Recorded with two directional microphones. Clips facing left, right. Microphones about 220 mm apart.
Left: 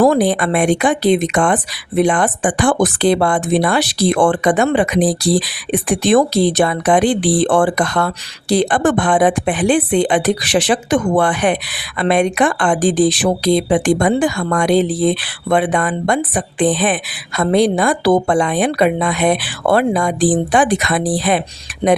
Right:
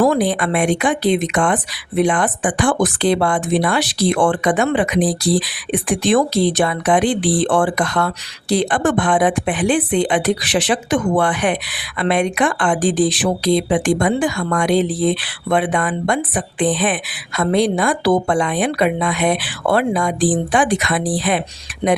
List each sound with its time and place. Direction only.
0.0 s speech: 40° left (ahead or behind)